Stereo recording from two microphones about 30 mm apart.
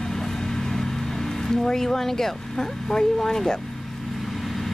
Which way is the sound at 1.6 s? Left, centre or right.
Centre.